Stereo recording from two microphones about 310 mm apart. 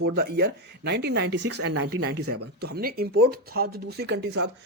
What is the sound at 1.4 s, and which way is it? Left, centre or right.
Speech, right.